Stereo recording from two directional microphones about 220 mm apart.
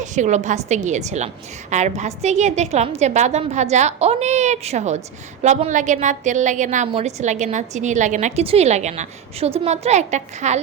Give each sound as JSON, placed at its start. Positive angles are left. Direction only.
{"t": 0.0, "sound": "a woman's voice", "side_deg": -35}